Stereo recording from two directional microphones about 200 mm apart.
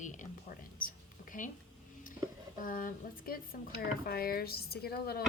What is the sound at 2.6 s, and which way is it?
Speech, 45° left (ahead or behind).